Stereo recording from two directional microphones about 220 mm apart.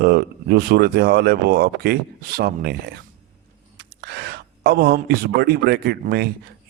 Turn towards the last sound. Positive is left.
turn(degrees=-45)  # may be behind; listen again after turning